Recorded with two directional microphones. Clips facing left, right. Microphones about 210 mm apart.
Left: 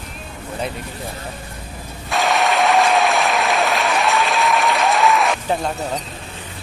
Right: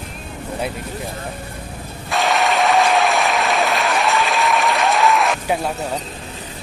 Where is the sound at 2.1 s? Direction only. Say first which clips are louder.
Even; centre (ahead or behind).